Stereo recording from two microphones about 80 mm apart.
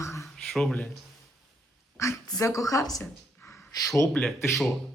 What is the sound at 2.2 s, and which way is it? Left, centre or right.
Speech, left.